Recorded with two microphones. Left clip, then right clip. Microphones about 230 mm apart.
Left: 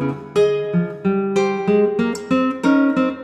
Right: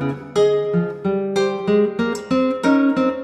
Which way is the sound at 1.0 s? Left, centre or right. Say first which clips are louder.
Left 2 dB; left.